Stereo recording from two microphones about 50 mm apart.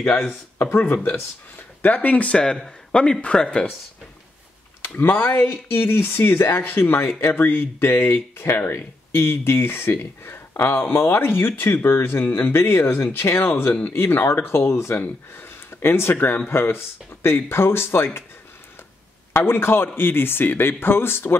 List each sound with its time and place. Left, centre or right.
0.6 s speech: left
1.8 s speech: left
2.3 s speech: centre
4.8 s speech: left
15.0 s speech: left
19.3 s speech: left